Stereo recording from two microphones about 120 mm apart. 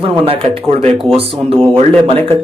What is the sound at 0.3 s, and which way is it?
Speech, 55° right (ahead or behind).